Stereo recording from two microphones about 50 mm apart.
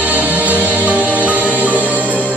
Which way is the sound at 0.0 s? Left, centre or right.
Right.